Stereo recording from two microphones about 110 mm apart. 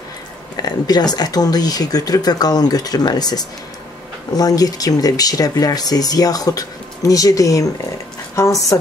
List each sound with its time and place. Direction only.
0.6 s speech: 40° left (ahead or behind)